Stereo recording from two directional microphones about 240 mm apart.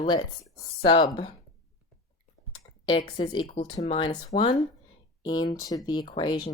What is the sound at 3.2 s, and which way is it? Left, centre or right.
A woman's voice, left.